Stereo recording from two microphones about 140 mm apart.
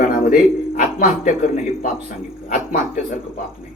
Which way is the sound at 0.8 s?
65° left (ahead or behind).